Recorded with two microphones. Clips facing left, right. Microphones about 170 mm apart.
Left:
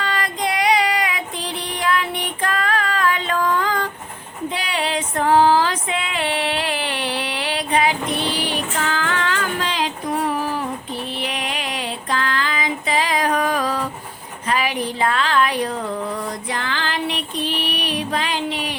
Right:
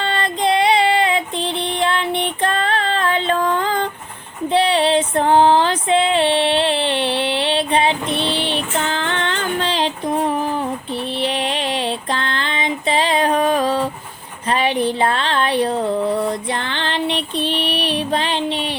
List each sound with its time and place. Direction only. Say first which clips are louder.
0.0 s child singing: right 4 dB; 30° right (ahead or behind)
4.5 s female singing: right 10 dB; 30° right (ahead or behind)
14.5 s a sound: right 4 dB; 30° right (ahead or behind)